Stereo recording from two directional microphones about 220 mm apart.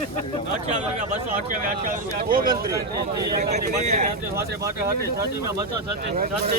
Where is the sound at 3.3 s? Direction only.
35° right (ahead or behind).